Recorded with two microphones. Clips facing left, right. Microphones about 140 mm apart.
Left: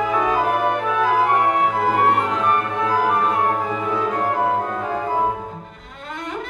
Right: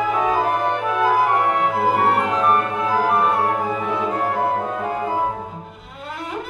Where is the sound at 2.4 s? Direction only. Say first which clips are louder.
Right 1 dB; 5° right (ahead or behind).